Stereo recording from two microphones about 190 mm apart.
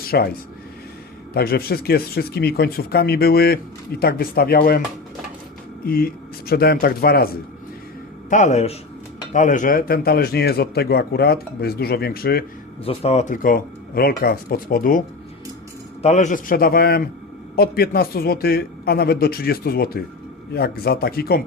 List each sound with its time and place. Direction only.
0.0 s speech: 55° left (ahead or behind)
1.3 s speech: 55° left (ahead or behind)
5.8 s speech: 50° left (ahead or behind)
8.3 s speech: 40° left (ahead or behind)
12.8 s speech: 30° left (ahead or behind); by 15.0 s 45° left (ahead or behind)
16.0 s speech: 35° left (ahead or behind); by 21.4 s 55° left (ahead or behind)